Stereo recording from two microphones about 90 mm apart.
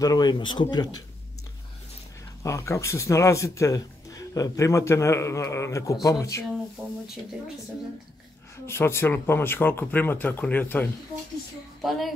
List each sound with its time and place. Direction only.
0.0 s speech: 45° left (ahead or behind)
2.4 s speech: 35° left (ahead or behind)
8.6 s speech: 30° left (ahead or behind)
11.8 s a woman's voice: centre (ahead or behind)